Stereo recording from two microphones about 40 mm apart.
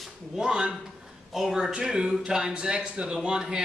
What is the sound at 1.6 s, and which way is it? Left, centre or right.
A man's voice, centre.